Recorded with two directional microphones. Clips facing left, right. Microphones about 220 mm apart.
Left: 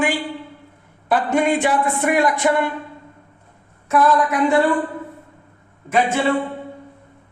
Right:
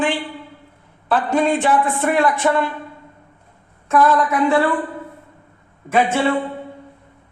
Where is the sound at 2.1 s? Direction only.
15° left (ahead or behind).